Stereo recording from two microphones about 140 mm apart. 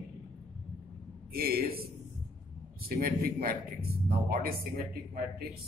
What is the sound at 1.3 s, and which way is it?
Speech, 90° right.